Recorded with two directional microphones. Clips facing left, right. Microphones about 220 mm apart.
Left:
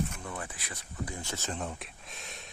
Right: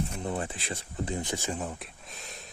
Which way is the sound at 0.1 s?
30° right (ahead or behind).